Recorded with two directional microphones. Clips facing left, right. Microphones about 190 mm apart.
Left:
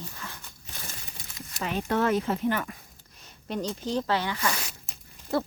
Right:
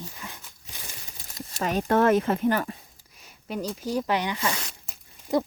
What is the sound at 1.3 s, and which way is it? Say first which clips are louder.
Speech: right 4 dB; 40° right (ahead or behind).